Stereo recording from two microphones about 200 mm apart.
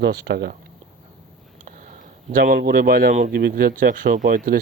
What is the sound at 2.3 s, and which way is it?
Speech, 45° right (ahead or behind).